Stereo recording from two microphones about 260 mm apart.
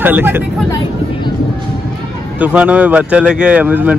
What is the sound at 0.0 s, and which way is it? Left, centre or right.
Speech, centre.